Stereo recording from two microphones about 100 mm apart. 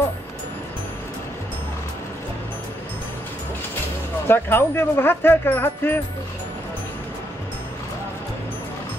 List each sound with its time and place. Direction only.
4.3 s speech: 20° left (ahead or behind)